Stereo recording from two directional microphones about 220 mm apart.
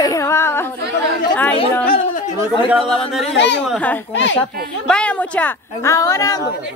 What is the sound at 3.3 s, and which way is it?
Speech, 55° left (ahead or behind).